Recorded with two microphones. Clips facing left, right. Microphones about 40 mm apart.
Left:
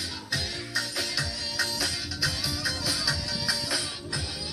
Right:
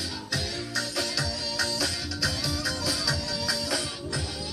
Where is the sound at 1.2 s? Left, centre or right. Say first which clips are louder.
Right 1 dB; left.